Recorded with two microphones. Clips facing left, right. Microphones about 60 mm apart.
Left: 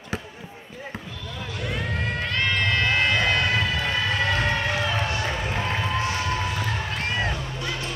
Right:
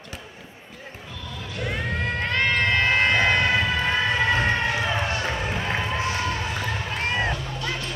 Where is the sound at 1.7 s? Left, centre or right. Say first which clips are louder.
Right 1 dB; right.